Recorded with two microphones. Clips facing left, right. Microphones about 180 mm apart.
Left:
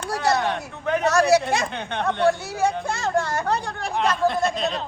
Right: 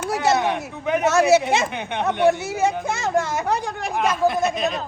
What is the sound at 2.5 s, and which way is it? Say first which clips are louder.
Speech: right 2 dB; 20° right (ahead or behind).